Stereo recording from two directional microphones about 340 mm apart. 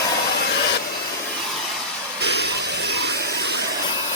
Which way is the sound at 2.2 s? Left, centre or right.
Right.